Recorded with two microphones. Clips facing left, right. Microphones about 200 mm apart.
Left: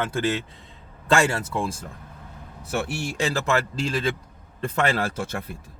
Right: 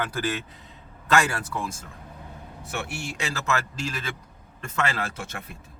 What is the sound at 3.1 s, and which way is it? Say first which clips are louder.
Speech: left 5 dB; 35° left (ahead or behind).